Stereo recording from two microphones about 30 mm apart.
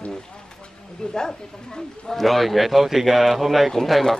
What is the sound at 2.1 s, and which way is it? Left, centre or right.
A man's voice, centre.